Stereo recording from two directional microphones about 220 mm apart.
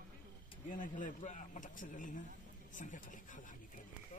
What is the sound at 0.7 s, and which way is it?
Speech, 35° left (ahead or behind).